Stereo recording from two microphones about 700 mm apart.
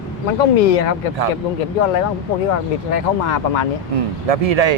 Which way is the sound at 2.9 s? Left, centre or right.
Left.